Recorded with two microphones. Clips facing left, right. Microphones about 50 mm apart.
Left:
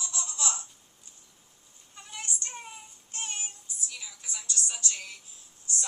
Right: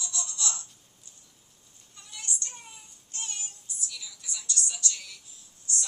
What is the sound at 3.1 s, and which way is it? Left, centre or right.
Music, left.